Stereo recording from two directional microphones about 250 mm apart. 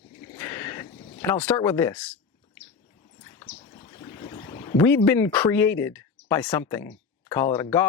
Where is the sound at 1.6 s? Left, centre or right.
Centre.